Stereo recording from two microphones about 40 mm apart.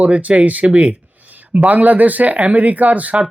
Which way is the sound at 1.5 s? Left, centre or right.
Right.